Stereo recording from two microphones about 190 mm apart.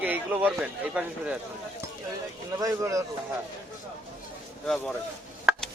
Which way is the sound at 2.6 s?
15° right (ahead or behind).